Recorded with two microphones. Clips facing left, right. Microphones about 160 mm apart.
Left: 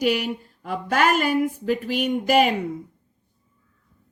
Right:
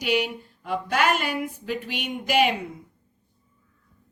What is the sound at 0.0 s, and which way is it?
Speech, 45° left (ahead or behind).